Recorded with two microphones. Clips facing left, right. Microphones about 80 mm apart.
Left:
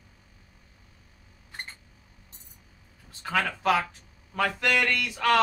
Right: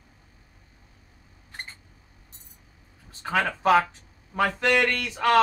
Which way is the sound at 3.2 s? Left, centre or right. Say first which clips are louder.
Right 3 dB; right.